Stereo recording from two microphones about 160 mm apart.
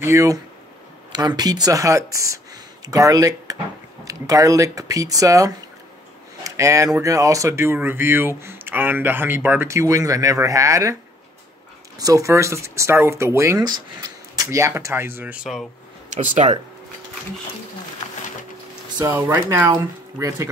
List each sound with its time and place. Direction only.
0.0 s speech: 20° right (ahead or behind)
6.4 s a sound: 20° right (ahead or behind)
7.0 s speech: 20° right (ahead or behind)
12.0 s speech: 20° right (ahead or behind); by 15.6 s 5° right (ahead or behind)
16.1 s speech: 50° right (ahead or behind)
19.0 s speech: 10° right (ahead or behind)